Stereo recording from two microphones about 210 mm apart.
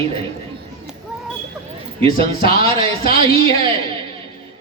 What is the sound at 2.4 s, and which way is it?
Speech, 25° right (ahead or behind).